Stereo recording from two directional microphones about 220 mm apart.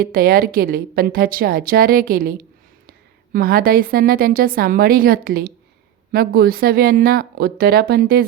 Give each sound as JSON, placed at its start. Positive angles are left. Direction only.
{"t": 0.0, "sound": "a woman's voice", "side_deg": -40}